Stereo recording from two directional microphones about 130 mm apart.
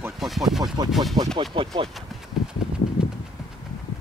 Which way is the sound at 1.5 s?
40° right (ahead or behind).